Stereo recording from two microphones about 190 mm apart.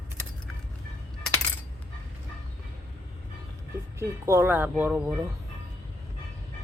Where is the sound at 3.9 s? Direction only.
15° right (ahead or behind).